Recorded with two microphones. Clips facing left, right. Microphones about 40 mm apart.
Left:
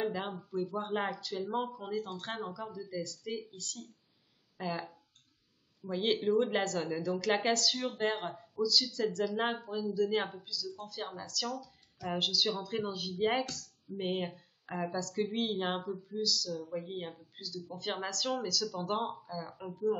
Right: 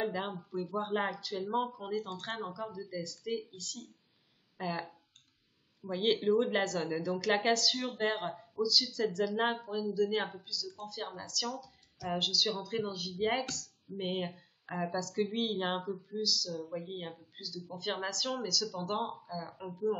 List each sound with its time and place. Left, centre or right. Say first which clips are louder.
0.0 s speech: even; centre
0.7 s speech: right 3 dB; centre
5.9 s speech: right 1 dB; centre
16.4 s speech: left 1 dB; centre
16.7 s a woman's voice: left 1 dB; centre